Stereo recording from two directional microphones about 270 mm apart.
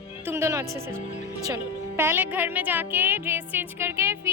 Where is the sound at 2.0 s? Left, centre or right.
Centre.